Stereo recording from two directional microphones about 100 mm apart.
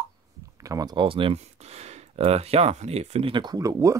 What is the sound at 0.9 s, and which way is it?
Speech, 55° right (ahead or behind).